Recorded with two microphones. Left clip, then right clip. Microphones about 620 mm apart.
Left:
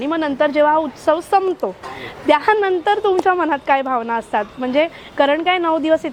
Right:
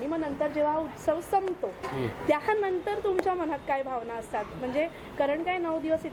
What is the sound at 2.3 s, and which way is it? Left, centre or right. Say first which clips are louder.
A woman's voice: left 12 dB; left.